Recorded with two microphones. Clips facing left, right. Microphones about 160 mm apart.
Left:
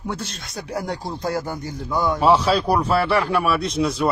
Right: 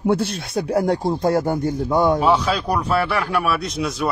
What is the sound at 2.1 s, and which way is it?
Speech, 5° left (ahead or behind).